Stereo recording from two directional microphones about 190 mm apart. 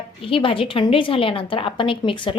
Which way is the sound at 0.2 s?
30° left (ahead or behind).